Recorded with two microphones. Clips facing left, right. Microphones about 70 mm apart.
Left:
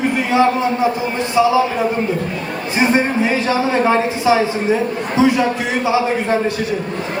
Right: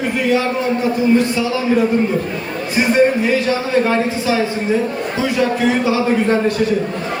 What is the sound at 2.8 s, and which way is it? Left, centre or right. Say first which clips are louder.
A man's voice: right 2 dB; left.